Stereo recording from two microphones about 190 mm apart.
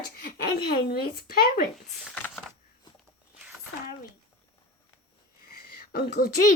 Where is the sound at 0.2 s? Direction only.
55° left (ahead or behind).